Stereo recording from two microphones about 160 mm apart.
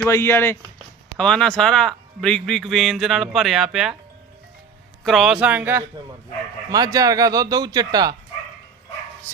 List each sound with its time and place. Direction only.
0.1 s speech: 15° left (ahead or behind)
1.2 s a man's voice: 5° left (ahead or behind)
5.0 s a man's voice: centre (ahead or behind)
6.7 s a man's voice: 20° right (ahead or behind)